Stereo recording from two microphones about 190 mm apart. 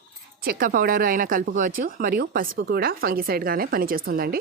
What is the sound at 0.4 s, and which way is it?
Speech, 50° right (ahead or behind).